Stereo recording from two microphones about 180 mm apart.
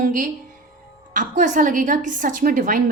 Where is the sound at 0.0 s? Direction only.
50° right (ahead or behind).